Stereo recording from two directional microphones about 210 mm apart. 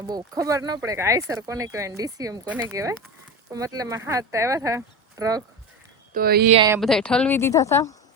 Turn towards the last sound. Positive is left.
turn(degrees=15)  # may be behind; listen again after turning